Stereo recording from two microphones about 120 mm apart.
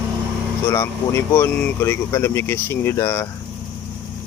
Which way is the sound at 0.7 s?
20° left (ahead or behind).